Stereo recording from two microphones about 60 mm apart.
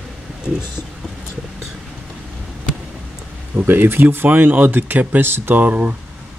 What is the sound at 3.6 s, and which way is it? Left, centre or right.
Speech, right.